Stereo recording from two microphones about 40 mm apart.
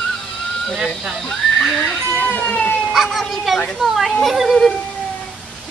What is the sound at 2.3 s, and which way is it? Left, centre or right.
Speech, left.